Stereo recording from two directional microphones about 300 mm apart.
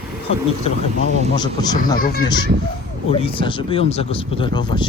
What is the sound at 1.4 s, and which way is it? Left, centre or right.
Speech, centre.